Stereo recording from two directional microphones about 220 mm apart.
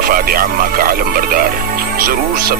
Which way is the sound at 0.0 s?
40° right (ahead or behind).